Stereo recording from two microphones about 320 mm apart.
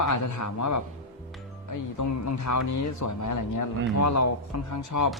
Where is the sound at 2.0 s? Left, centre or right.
Left.